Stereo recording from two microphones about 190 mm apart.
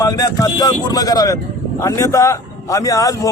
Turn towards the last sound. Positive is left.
turn(degrees=20)  # may be behind; listen again after turning